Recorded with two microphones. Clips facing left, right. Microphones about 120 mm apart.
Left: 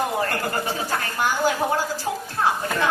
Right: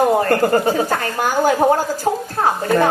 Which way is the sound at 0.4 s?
45° right (ahead or behind).